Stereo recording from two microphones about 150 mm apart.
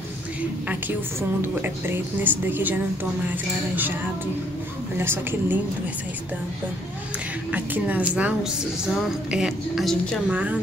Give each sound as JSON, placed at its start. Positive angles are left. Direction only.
{"t": 1.4, "sound": "speech", "side_deg": -15}
{"t": 4.9, "sound": "speech", "side_deg": -15}
{"t": 7.5, "sound": "speech", "side_deg": -10}